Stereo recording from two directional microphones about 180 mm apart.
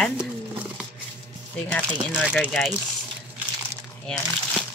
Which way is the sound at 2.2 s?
5° left (ahead or behind).